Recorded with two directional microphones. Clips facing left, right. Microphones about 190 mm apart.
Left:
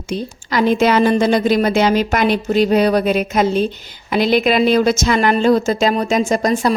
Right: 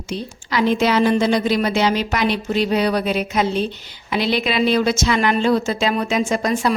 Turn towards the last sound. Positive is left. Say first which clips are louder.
# left 3 dB
turn(degrees=40)  # may be behind; listen again after turning